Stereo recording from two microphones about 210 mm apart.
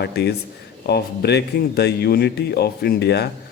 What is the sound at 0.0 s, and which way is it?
Speech, 50° left (ahead or behind).